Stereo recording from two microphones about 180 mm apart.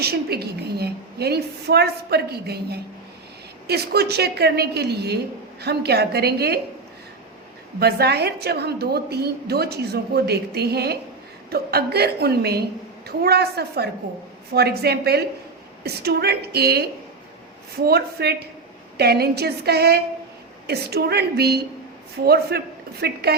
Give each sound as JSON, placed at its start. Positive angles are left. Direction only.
{"t": 0.0, "sound": "a woman's voice", "side_deg": -60}
{"t": 7.8, "sound": "a woman's voice", "side_deg": -60}